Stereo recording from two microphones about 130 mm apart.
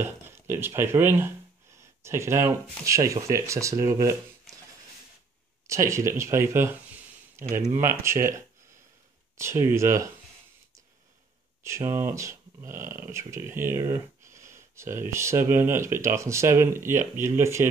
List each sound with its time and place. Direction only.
0.0 s speech: 15° right (ahead or behind)
5.7 s speech: 20° right (ahead or behind)
9.4 s speech: 20° right (ahead or behind)
11.6 s speech: 20° right (ahead or behind)